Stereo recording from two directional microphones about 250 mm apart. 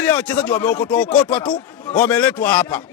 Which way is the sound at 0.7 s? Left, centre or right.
Left.